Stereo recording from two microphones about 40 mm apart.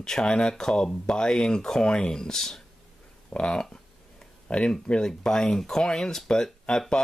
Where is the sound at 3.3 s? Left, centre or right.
Left.